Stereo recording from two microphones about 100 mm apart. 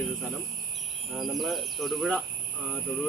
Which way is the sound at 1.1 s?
Centre (ahead or behind).